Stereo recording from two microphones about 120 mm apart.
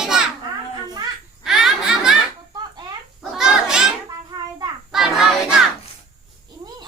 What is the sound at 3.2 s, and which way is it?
Children playing, 5° right (ahead or behind).